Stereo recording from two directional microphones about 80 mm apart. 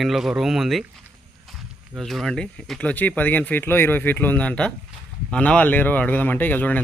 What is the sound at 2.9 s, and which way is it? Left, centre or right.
Speech, centre.